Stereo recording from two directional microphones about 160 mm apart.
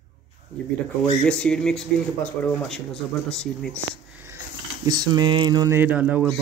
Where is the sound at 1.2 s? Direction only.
5° left (ahead or behind).